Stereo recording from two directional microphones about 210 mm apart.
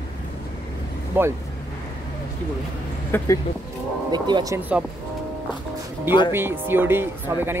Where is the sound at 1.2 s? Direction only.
10° right (ahead or behind).